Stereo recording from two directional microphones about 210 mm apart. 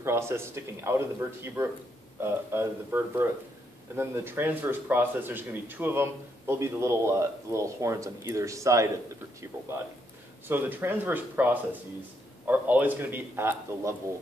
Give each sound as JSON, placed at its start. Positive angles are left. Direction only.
{"t": 0.0, "sound": "speech", "side_deg": -10}
{"t": 10.5, "sound": "speech", "side_deg": -10}